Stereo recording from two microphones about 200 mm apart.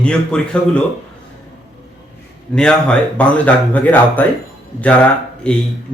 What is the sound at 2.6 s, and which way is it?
Speech, 5° left (ahead or behind).